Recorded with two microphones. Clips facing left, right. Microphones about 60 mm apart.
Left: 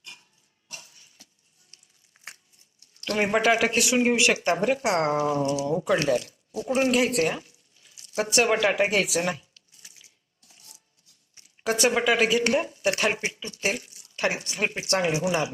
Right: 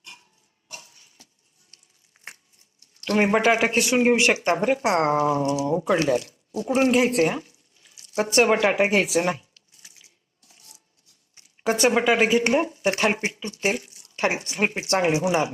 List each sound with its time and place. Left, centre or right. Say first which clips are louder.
2.2 s a sound: right 2 dB; centre
3.0 s speech: right 3 dB; right
11.6 s speech: right 3 dB; right